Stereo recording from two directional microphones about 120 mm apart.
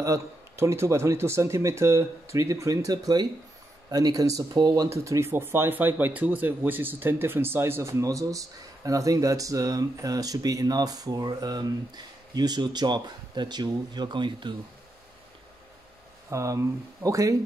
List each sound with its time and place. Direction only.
0.0 s speech: 25° right (ahead or behind)
16.3 s speech: 25° right (ahead or behind)